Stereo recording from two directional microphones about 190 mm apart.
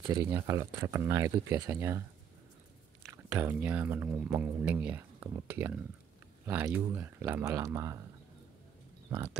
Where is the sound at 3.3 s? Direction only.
10° right (ahead or behind).